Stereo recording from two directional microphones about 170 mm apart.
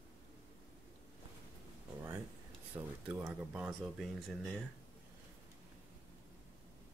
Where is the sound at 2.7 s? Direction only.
10° right (ahead or behind).